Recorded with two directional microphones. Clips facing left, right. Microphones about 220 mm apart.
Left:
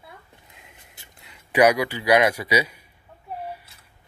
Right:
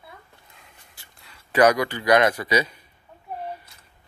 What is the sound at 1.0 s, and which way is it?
Speech, 20° left (ahead or behind).